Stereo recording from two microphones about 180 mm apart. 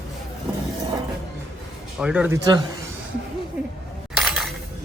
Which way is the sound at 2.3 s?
20° right (ahead or behind).